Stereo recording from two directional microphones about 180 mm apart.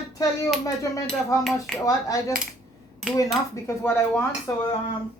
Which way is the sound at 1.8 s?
20° left (ahead or behind).